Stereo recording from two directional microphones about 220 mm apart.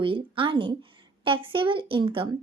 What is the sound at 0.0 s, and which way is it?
A woman's voice, 25° right (ahead or behind).